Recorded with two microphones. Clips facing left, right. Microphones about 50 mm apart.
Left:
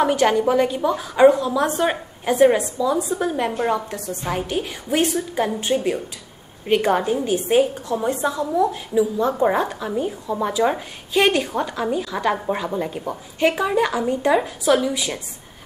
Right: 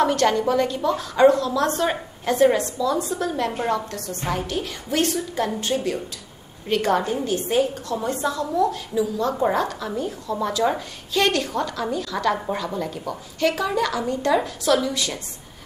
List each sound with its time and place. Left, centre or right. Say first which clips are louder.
0.0 s a woman's voice: left 2 dB; centre